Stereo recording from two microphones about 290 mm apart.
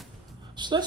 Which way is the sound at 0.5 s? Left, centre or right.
Centre.